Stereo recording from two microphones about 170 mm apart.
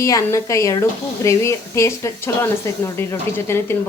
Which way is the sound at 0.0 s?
20° left (ahead or behind).